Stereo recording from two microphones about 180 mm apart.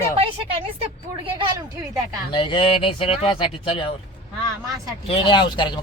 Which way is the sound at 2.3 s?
30° left (ahead or behind).